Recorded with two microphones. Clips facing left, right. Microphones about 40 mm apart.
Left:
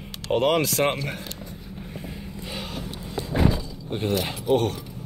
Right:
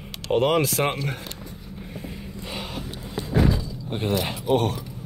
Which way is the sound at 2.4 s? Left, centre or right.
Centre.